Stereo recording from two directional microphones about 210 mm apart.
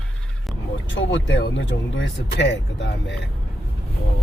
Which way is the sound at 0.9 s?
60° left (ahead or behind).